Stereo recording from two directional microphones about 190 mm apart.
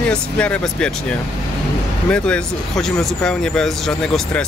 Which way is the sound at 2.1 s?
5° left (ahead or behind).